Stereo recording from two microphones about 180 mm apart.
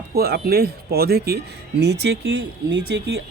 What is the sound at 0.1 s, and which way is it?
Speech, 60° right (ahead or behind).